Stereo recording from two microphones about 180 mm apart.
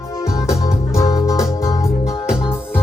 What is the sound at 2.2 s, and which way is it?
Music, 5° right (ahead or behind).